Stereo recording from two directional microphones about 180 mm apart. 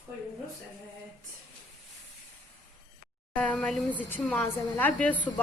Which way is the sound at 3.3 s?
5° left (ahead or behind).